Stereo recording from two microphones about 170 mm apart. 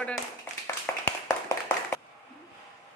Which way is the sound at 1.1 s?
20° left (ahead or behind).